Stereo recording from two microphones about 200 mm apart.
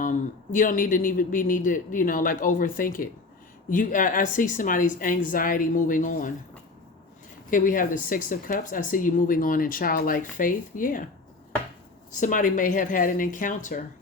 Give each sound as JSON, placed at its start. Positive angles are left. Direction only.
{"t": 0.0, "sound": "speech", "side_deg": 40}
{"t": 7.5, "sound": "speech", "side_deg": 40}
{"t": 12.1, "sound": "speech", "side_deg": 40}